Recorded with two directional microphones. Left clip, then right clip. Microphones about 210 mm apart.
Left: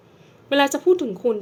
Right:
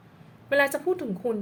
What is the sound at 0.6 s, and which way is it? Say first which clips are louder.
Speech: left 8 dB; 30° left (ahead or behind).